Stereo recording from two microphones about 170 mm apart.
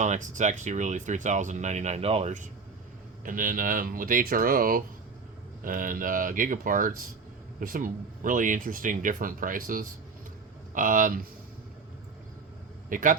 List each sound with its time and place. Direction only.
0.0 s speech: 45° right (ahead or behind)
12.9 s speech: 50° right (ahead or behind)